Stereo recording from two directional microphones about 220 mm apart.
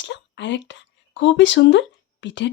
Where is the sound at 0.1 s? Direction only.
55° left (ahead or behind).